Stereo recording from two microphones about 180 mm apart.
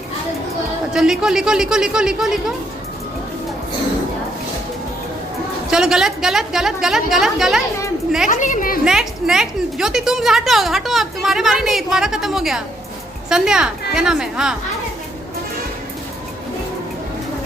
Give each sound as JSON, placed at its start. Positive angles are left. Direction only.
{"t": 0.9, "sound": "a woman's voice", "side_deg": -5}
{"t": 5.7, "sound": "a woman's voice", "side_deg": -5}
{"t": 8.3, "sound": "a woman's voice", "side_deg": 45}
{"t": 8.8, "sound": "a woman's voice", "side_deg": -5}